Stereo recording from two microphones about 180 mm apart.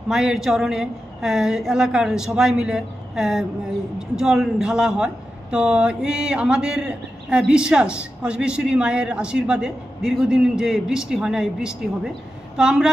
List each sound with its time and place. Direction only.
0.1 s speech: centre (ahead or behind)